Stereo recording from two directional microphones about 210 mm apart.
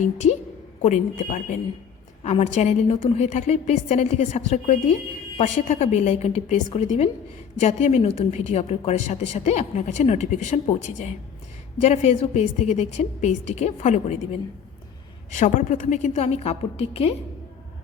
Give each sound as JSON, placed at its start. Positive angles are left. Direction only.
{"t": 0.0, "sound": "a woman's voice", "side_deg": 35}
{"t": 15.3, "sound": "a woman's voice", "side_deg": 35}